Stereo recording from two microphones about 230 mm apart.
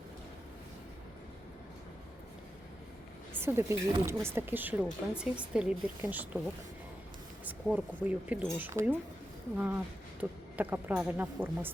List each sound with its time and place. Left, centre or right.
3.4 s a woman's voice: centre
7.4 s a woman's voice: centre
10.2 s a woman's voice: centre